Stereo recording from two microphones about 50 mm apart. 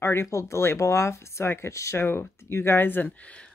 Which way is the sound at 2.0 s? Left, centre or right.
Left.